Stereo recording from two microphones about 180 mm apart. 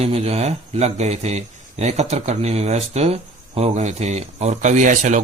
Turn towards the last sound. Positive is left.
turn(degrees=-45)  # may be behind; listen again after turning